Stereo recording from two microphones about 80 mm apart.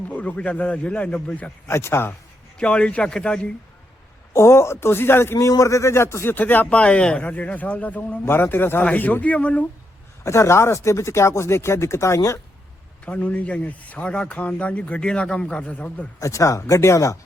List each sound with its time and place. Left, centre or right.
0.1 s speech: centre
1.6 s speech: left
2.6 s speech: centre
4.4 s speech: left
6.3 s speech: left
10.2 s speech: left
13.1 s speech: centre
16.2 s speech: left